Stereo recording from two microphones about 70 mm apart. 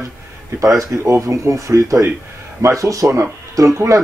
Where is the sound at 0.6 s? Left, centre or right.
Right.